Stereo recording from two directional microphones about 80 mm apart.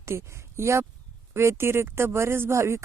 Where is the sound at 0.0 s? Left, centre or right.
Right.